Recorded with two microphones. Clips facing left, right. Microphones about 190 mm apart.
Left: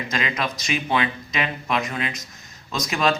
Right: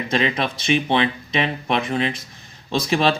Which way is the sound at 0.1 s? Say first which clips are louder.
Right 6 dB; 30° right (ahead or behind).